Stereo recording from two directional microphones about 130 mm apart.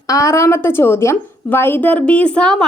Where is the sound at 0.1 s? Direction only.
25° left (ahead or behind).